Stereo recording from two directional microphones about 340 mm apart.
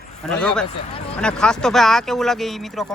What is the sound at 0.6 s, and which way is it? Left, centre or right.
Speech, centre.